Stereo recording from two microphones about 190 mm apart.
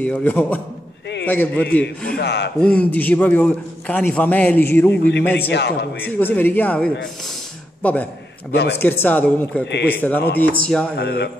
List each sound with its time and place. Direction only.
0.0 s a man's voice: 10° left (ahead or behind)
2.1 s speech: 60° left (ahead or behind)
2.6 s a man's voice: 5° left (ahead or behind)
5.5 s speech: 65° left (ahead or behind)
6.0 s a man's voice: 10° left (ahead or behind)
11.0 s speech: 60° left (ahead or behind)